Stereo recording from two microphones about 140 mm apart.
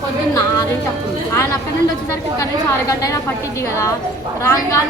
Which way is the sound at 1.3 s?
20° left (ahead or behind).